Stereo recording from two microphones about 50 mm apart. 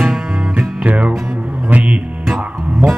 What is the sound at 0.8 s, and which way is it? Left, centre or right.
Music, right.